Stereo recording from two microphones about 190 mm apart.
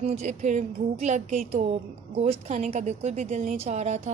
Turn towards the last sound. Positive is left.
turn(degrees=-35)  # may be behind; listen again after turning